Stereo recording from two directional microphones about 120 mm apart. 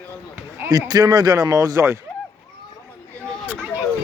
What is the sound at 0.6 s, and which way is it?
Speech, 30° right (ahead or behind).